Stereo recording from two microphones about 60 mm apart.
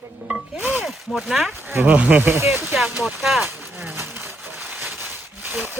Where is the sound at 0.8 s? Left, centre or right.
Centre.